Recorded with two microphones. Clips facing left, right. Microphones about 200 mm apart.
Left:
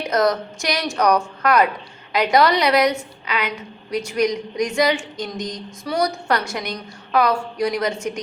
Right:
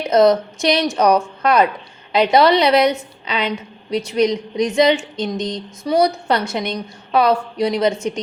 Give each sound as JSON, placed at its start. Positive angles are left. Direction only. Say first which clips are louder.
{"t": 0.1, "sound": "a woman's voice", "louder": "right 7 dB", "side_deg": -25}